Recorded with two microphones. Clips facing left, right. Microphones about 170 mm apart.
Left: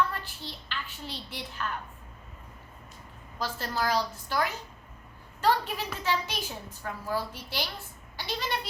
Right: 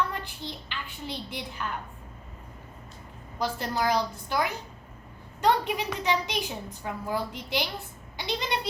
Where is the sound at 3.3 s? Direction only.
15° right (ahead or behind).